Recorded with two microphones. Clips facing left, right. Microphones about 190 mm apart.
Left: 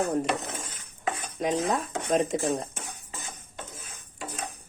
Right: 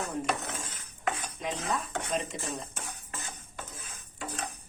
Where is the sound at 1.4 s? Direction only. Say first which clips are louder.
Left 7 dB; 40° left (ahead or behind).